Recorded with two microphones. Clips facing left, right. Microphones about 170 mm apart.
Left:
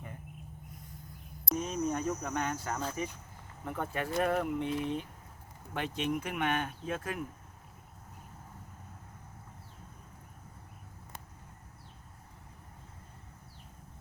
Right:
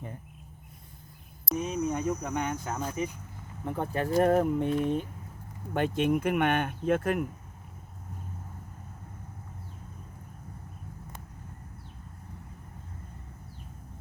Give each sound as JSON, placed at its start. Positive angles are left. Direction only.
{"t": 1.5, "sound": "speech", "side_deg": -10}
{"t": 3.7, "sound": "speech", "side_deg": -30}